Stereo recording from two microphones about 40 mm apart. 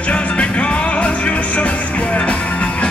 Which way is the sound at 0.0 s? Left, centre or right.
Left.